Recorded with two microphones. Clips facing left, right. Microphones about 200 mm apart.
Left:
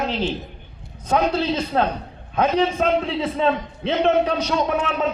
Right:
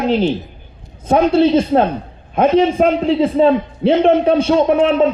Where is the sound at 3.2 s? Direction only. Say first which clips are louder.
Right 9 dB; 30° right (ahead or behind).